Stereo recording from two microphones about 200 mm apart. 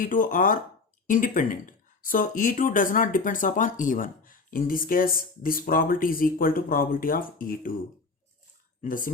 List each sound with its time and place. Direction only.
0.0 s speech: 40° left (ahead or behind)
8.8 s speech: 40° left (ahead or behind)